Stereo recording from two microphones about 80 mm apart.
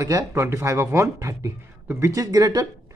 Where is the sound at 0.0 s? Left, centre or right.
Right.